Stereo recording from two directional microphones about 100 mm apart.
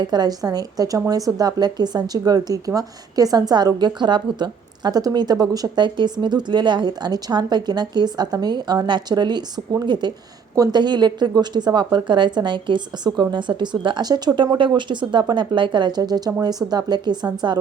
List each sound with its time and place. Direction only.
0.1 s a woman's voice: 40° right (ahead or behind)